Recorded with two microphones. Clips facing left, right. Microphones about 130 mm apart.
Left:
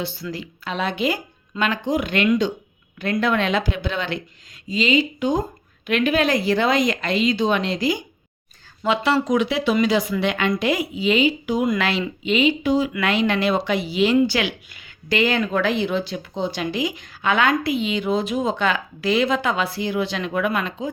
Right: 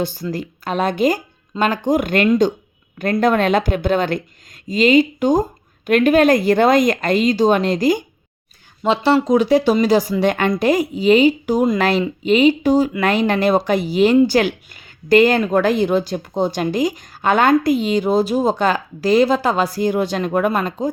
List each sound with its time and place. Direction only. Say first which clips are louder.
0.0 s speech: right 6 dB; 45° right (ahead or behind)
8.8 s speech: right 4 dB; 25° right (ahead or behind)
9.5 s a woman's voice: right 6 dB; 40° right (ahead or behind)